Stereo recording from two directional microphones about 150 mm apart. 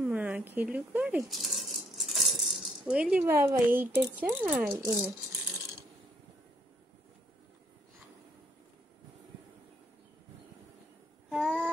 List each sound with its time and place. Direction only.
0.0 s speech: 10° right (ahead or behind)
4.7 s speech: 20° right (ahead or behind)
11.2 s babbling: 5° right (ahead or behind)